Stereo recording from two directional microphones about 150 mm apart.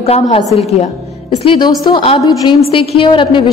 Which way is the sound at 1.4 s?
30° left (ahead or behind).